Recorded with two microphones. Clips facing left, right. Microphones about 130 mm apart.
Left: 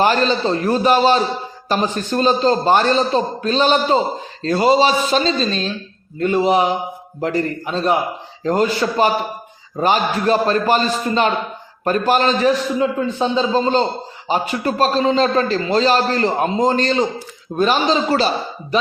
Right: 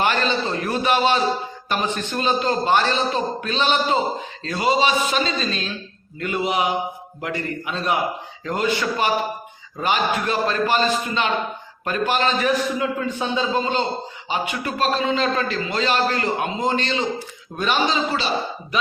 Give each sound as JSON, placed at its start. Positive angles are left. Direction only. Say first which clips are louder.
{"t": 0.0, "sound": "a man's voice", "louder": "left 5 dB", "side_deg": 35}
{"t": 12.5, "sound": "a man's voice", "louder": "left 4 dB", "side_deg": 25}